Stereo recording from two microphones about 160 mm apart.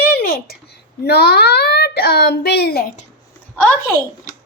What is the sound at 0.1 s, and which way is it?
A child's voice, 70° left (ahead or behind).